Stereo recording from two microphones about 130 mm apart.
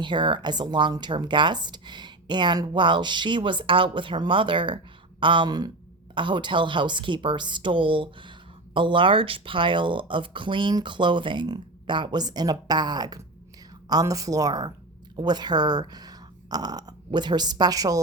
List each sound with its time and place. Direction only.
0.0 s a woman's voice: 35° right (ahead or behind)